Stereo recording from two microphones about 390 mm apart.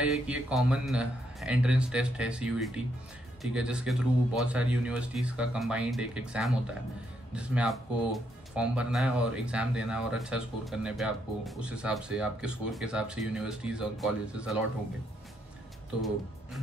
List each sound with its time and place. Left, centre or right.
0.0 s speech: centre